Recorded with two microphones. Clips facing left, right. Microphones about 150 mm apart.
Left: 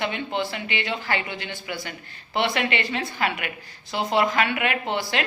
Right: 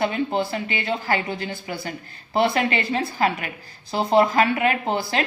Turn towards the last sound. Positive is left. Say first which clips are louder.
# right 2 dB
turn(degrees=-40)  # may be behind; listen again after turning